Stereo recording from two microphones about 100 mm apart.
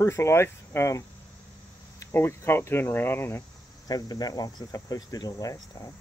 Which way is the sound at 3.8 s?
40° left (ahead or behind).